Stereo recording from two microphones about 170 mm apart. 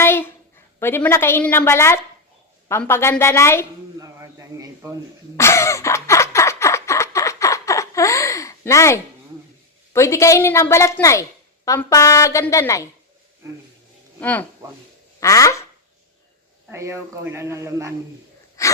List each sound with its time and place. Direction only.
0.0 s a sound: 15° left (ahead or behind)
0.8 s a woman's voice: 15° left (ahead or behind)
4.0 s a sound: 20° right (ahead or behind)
5.4 s a sound: 15° left (ahead or behind)
9.9 s a woman's voice: 15° left (ahead or behind)
14.2 s speech: 10° left (ahead or behind)
15.2 s quack: 20° left (ahead or behind)
16.6 s speech: 15° right (ahead or behind)
18.6 s gasp: 20° left (ahead or behind)